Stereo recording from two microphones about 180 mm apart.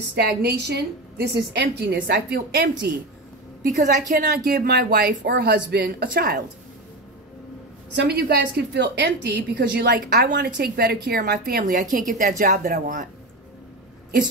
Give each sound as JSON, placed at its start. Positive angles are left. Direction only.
{"t": 0.1, "sound": "a woman's voice", "side_deg": -65}
{"t": 3.6, "sound": "a woman's voice", "side_deg": -45}
{"t": 7.9, "sound": "a woman's voice", "side_deg": -65}